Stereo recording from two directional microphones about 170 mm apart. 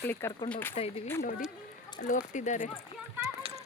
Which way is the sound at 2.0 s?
50° left (ahead or behind).